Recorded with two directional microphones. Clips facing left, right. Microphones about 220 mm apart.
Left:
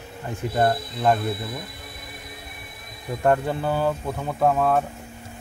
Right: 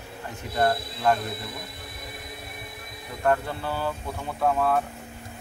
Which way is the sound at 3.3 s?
20° left (ahead or behind).